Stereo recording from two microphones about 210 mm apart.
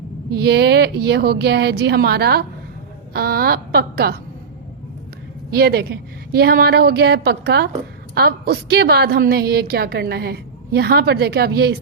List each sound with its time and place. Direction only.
0.3 s a woman's voice: 50° right (ahead or behind)
5.5 s a woman's voice: 50° right (ahead or behind)